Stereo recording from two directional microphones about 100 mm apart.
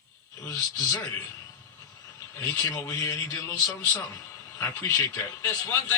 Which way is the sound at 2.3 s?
25° left (ahead or behind).